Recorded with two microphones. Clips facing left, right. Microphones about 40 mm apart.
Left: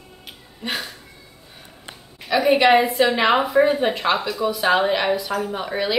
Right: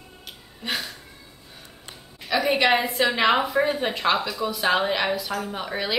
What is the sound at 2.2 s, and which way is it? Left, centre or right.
A woman's voice, centre.